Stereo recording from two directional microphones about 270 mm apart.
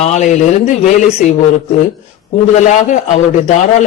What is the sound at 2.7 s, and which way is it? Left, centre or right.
Speech, left.